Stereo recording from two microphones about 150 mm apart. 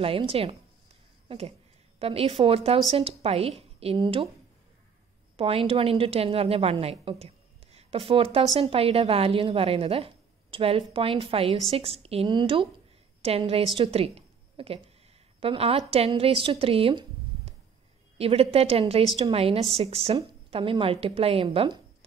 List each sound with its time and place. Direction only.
0.0 s a woman's voice: 40° right (ahead or behind)
2.0 s a woman's voice: 40° right (ahead or behind)
5.3 s a woman's voice: 40° right (ahead or behind)
18.1 s a woman's voice: 40° right (ahead or behind)